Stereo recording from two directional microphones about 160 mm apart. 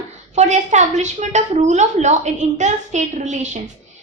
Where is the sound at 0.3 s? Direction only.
45° right (ahead or behind).